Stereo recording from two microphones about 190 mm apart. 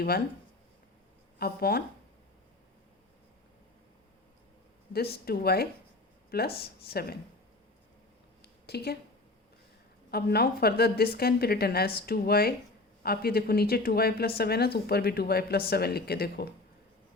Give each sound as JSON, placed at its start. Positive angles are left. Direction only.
{"t": 1.4, "sound": "speech", "side_deg": 55}
{"t": 5.1, "sound": "a woman's voice", "side_deg": 55}
{"t": 8.4, "sound": "a sound", "side_deg": 60}
{"t": 10.1, "sound": "a woman's voice", "side_deg": 55}